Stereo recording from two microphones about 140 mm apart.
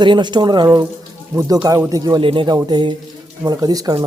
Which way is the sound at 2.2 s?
35° right (ahead or behind).